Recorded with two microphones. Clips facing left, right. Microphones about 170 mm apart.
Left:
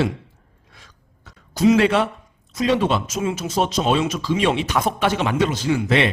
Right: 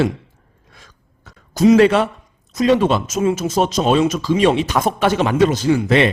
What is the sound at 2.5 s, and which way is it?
Speech, 45° right (ahead or behind).